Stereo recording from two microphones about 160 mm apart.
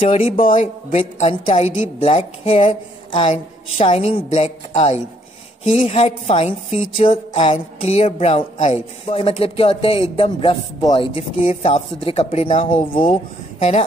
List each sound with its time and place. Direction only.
0.0 s speech: 35° left (ahead or behind)